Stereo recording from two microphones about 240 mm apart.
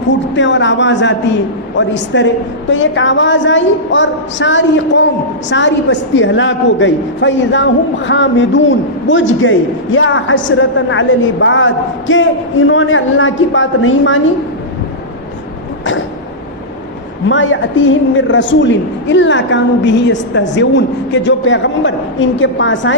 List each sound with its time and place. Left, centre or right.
0.1 s a woman's voice: left
15.8 s a sound: left
17.2 s a woman's voice: left